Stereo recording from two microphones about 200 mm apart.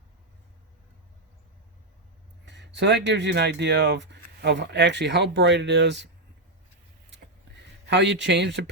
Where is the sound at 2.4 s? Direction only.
60° right (ahead or behind).